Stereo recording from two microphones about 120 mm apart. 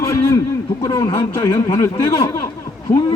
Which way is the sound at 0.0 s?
25° left (ahead or behind).